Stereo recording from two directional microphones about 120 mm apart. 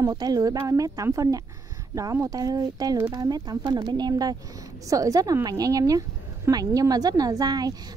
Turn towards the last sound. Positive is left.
turn(degrees=-30)  # may be behind; listen again after turning